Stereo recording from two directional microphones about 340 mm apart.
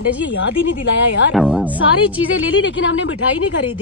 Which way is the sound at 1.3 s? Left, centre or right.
Centre.